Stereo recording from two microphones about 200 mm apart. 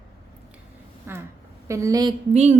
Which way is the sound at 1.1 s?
10° right (ahead or behind).